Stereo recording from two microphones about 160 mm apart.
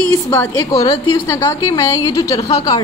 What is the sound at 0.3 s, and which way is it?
A woman's voice, 15° left (ahead or behind).